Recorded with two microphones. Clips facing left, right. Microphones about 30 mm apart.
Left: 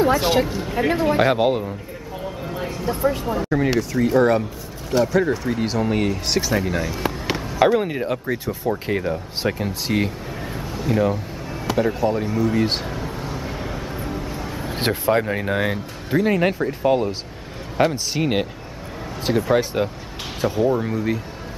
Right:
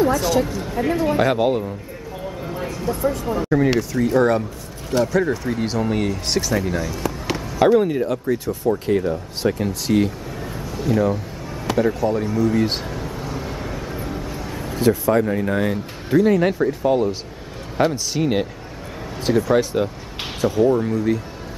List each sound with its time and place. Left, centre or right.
0.0 s speech: left
1.0 s speech: centre
2.4 s a sound: centre
2.7 s speech: left
3.3 s speech: centre
11.6 s music: centre
11.9 s speech: centre
13.3 s vehicle: centre
13.9 s a sound: centre
14.8 s speech: left; by 19.4 s centre
19.6 s speech: centre